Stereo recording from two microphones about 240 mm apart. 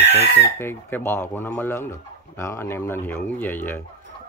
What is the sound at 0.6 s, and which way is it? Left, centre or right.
Speech, centre.